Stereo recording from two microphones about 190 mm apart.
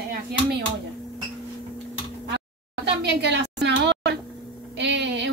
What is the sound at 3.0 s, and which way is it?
A woman's voice, 65° right (ahead or behind).